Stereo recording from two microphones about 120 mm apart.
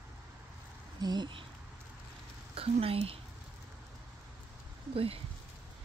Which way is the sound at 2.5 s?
55° right (ahead or behind).